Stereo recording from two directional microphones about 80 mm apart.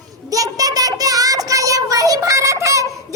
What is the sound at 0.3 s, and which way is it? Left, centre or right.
Child singing, right.